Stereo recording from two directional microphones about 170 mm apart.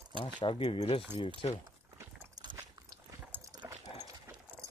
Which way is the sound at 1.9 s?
10° right (ahead or behind).